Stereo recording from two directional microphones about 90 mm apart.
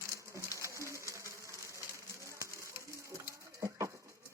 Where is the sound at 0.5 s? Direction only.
35° right (ahead or behind).